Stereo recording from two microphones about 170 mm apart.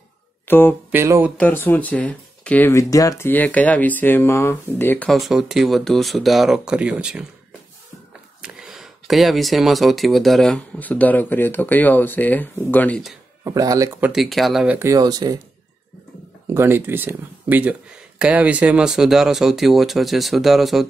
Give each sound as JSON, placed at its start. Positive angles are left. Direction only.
{"t": 0.5, "sound": "speech", "side_deg": 10}
{"t": 0.9, "sound": "speech", "side_deg": -15}
{"t": 1.4, "sound": "speech", "side_deg": 10}
{"t": 8.4, "sound": "speech", "side_deg": -5}
{"t": 13.4, "sound": "speech", "side_deg": -20}
{"t": 16.4, "sound": "speech", "side_deg": -15}